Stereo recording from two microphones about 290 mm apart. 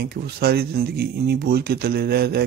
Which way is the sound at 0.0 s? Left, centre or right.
Right.